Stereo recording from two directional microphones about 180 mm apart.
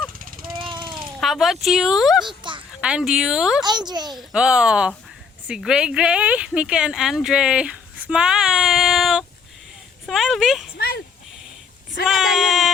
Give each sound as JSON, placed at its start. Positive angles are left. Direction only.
{"t": 0.2, "sound": "a sound", "side_deg": -50}
{"t": 0.6, "sound": "jackhammer", "side_deg": -25}
{"t": 1.2, "sound": "speech", "side_deg": 0}
{"t": 2.2, "sound": "a sound", "side_deg": -25}
{"t": 2.8, "sound": "speech", "side_deg": -5}
{"t": 3.6, "sound": "a child's voice", "side_deg": -25}
{"t": 4.1, "sound": "speech", "side_deg": 0}
{"t": 10.8, "sound": "a sound", "side_deg": 55}
{"t": 12.0, "sound": "speech", "side_deg": 0}